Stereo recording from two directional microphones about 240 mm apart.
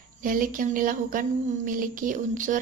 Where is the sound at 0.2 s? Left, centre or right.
Right.